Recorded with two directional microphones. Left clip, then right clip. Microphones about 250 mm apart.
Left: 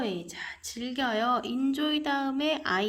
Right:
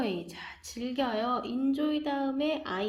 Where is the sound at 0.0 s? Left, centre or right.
Centre.